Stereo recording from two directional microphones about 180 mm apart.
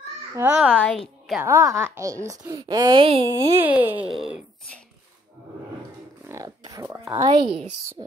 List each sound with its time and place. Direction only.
0.3 s speech: 10° right (ahead or behind)
0.7 s a woman's voice: 5° left (ahead or behind)
1.4 s speech: 15° right (ahead or behind)
3.5 s speech: 10° right (ahead or behind)
6.2 s speech: 20° right (ahead or behind)
7.3 s speech: 30° right (ahead or behind)